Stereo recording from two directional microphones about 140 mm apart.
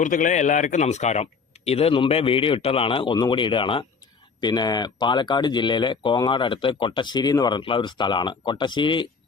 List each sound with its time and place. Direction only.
0.0 s speech: 65° left (ahead or behind); by 9.0 s 35° left (ahead or behind)